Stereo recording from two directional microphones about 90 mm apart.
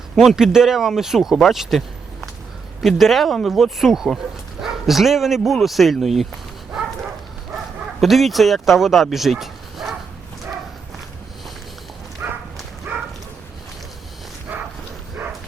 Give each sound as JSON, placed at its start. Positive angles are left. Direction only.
{"t": 0.2, "sound": "speech", "side_deg": -5}
{"t": 2.8, "sound": "speech", "side_deg": 0}
{"t": 8.0, "sound": "speech", "side_deg": 0}
{"t": 12.2, "sound": "bow-wow", "side_deg": -20}
{"t": 12.9, "sound": "dog", "side_deg": -20}
{"t": 14.5, "sound": "dog", "side_deg": -20}